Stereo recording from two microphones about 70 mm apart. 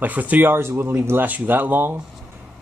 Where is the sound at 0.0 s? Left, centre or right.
Right.